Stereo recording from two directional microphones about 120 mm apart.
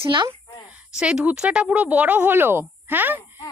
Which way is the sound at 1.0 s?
10° right (ahead or behind).